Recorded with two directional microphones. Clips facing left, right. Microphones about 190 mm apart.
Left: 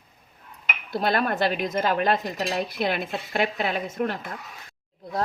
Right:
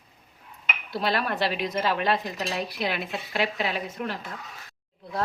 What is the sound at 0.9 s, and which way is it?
Speech, 50° left (ahead or behind).